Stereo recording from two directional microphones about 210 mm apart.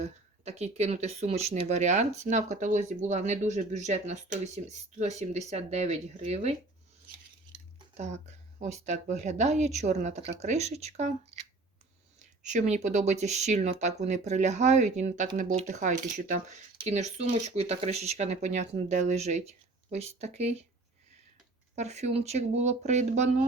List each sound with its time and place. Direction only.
0.0 s speech: 30° right (ahead or behind)
7.9 s speech: 35° right (ahead or behind)
12.2 s speech: 35° right (ahead or behind)
21.8 s speech: 30° right (ahead or behind)